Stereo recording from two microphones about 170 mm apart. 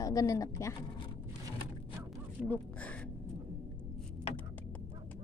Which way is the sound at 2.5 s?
10° left (ahead or behind).